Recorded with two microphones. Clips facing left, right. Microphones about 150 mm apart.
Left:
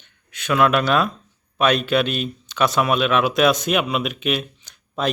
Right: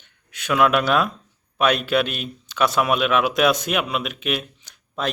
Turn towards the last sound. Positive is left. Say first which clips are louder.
# left 3 dB
turn(degrees=0)  # may be behind; listen again after turning